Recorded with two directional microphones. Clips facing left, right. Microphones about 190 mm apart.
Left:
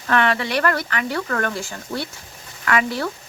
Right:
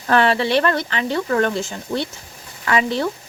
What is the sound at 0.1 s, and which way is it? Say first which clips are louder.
Speech: right 4 dB; 30° right (ahead or behind).